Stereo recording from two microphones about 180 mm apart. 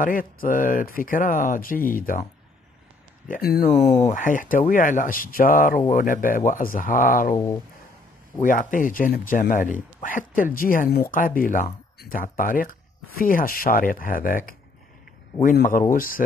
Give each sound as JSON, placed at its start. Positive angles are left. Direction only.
{"t": 0.0, "sound": "speech", "side_deg": 50}
{"t": 3.3, "sound": "speech", "side_deg": 55}
{"t": 8.4, "sound": "speech", "side_deg": 45}
{"t": 15.9, "sound": "speech", "side_deg": 50}